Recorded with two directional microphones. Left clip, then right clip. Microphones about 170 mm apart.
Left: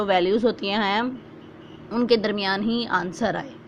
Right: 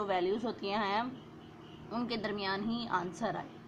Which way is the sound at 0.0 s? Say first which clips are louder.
Left 13 dB; 25° left (ahead or behind).